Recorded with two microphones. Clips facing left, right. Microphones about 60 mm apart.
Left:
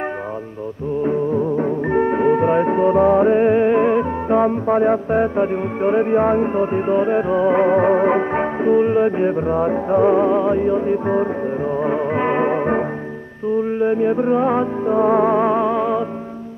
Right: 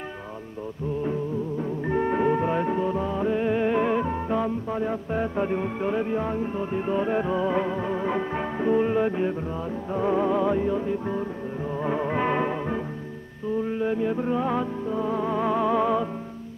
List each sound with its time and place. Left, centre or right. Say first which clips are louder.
1.9 s music: left 6 dB; left
3.6 s music: left 8 dB; left
4.4 s music: left 11 dB; left
5.3 s music: left 7 dB; left
7.0 s music: left 7 dB; left
7.6 s music: left 13 dB; left
8.5 s music: left 6 dB; left
9.5 s music: left 13 dB; left
9.9 s music: left 8 dB; left
12.4 s music: left 10 dB; left
13.7 s music: left 8 dB; left
14.9 s music: left 14 dB; left
15.4 s music: left 7 dB; left
15.7 s music: left 4 dB; centre